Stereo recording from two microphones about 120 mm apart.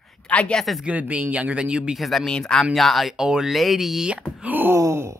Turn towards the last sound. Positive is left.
turn(degrees=-25)  # may be behind; listen again after turning